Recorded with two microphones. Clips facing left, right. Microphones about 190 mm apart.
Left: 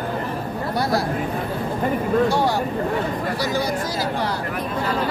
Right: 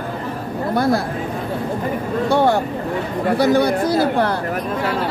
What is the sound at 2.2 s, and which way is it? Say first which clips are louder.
Speech: right 4 dB; 55° right (ahead or behind).